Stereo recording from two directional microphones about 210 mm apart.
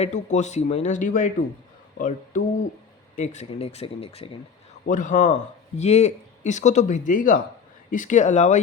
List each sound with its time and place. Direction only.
0.0 s speech: 35° left (ahead or behind)